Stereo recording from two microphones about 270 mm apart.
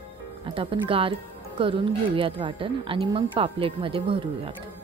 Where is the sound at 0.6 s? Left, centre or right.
Centre.